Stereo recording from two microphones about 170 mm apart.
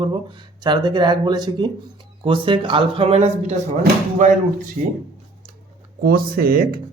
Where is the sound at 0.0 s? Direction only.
30° right (ahead or behind).